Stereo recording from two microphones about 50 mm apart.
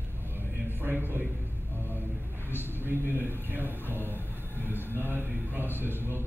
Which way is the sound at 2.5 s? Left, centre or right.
Left.